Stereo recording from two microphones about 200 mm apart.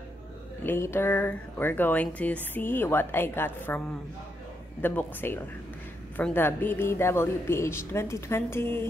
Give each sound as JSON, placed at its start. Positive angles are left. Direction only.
{"t": 0.7, "sound": "speech", "side_deg": 10}
{"t": 4.8, "sound": "speech", "side_deg": 10}